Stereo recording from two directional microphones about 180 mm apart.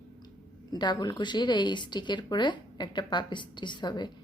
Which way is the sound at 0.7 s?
25° left (ahead or behind).